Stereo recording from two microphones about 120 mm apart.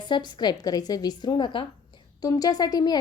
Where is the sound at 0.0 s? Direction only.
40° left (ahead or behind).